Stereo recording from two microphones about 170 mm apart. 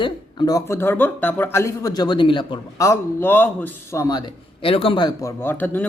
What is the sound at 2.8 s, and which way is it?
Speech, 15° left (ahead or behind).